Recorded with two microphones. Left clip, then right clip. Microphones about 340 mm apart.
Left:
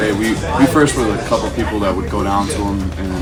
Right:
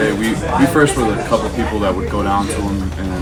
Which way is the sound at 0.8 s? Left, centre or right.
Centre.